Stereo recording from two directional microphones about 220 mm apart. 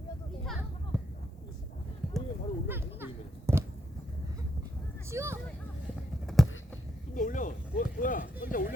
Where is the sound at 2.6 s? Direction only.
10° right (ahead or behind).